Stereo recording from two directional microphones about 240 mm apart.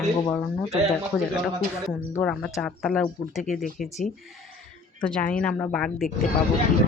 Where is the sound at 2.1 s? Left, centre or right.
Centre.